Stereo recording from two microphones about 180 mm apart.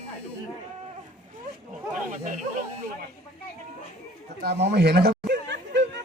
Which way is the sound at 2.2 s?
50° right (ahead or behind).